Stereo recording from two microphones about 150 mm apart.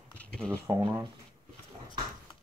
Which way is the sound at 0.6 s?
20° right (ahead or behind).